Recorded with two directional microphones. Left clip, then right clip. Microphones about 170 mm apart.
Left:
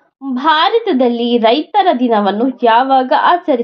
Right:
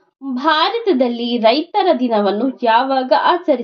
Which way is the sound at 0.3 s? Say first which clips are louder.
Left 4 dB; 35° left (ahead or behind).